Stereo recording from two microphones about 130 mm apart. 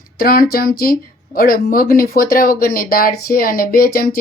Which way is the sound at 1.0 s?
90° left.